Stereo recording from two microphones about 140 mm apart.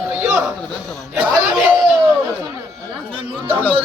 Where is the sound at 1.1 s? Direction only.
5° right (ahead or behind).